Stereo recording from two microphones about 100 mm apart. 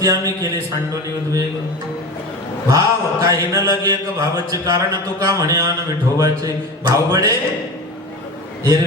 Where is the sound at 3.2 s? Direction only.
35° right (ahead or behind).